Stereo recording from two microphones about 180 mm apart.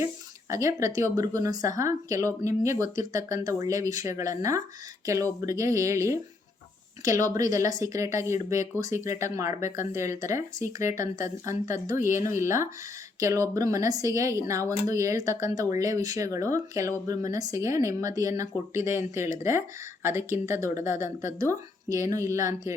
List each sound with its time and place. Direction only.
0.5 s speech: 15° right (ahead or behind)